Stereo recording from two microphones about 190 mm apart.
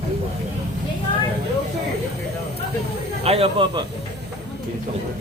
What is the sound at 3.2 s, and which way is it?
Speech, 30° right (ahead or behind).